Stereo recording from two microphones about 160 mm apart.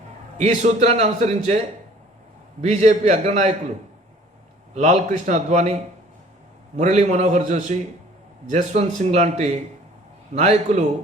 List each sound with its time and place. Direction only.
0.3 s a man's voice: 45° right (ahead or behind)
4.7 s a man's voice: 50° right (ahead or behind)
6.7 s a man's voice: 45° right (ahead or behind)